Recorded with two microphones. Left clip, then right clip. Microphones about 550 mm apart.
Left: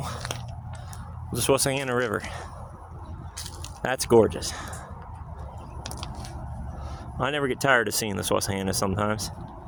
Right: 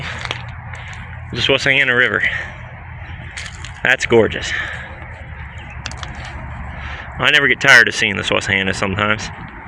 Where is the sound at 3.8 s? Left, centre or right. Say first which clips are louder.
Right 7 dB; left.